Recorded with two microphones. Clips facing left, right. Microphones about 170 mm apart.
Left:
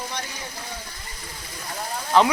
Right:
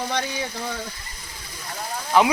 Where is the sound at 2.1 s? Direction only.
10° right (ahead or behind).